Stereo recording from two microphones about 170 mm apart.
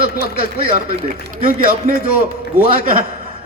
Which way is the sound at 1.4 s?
55° right (ahead or behind).